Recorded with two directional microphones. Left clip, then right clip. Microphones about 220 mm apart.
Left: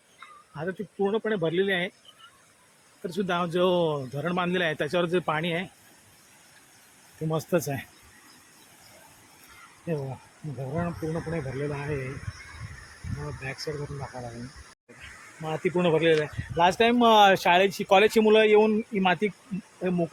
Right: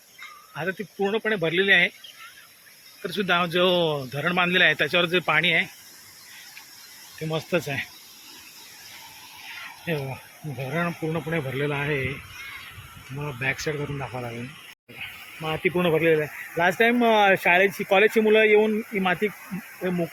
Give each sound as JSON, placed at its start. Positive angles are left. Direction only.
{"t": 0.5, "sound": "speech", "side_deg": 10}
{"t": 3.1, "sound": "speech", "side_deg": 15}
{"t": 7.3, "sound": "speech", "side_deg": 30}
{"t": 9.9, "sound": "speech", "side_deg": 10}
{"t": 10.6, "sound": "speech", "side_deg": 0}
{"t": 13.4, "sound": "speech", "side_deg": -5}
{"t": 15.4, "sound": "speech", "side_deg": 10}